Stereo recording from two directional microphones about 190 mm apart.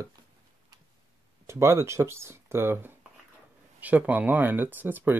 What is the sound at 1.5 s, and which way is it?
Speech, 15° right (ahead or behind).